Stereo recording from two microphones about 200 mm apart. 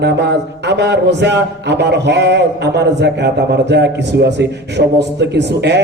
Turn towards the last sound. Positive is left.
turn(degrees=-60)  # may be behind; listen again after turning